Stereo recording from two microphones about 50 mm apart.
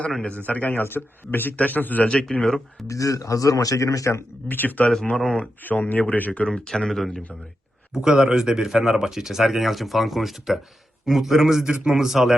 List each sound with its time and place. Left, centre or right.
0.2 s a man's voice: left
2.8 s speech: left
4.4 s a man's voice: left
5.1 s speech: centre
5.6 s a man's voice: left
6.7 s speech: centre
7.9 s speech: centre